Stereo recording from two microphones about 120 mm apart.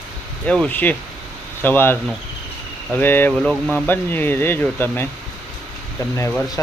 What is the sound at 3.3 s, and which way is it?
Speech, 5° left (ahead or behind).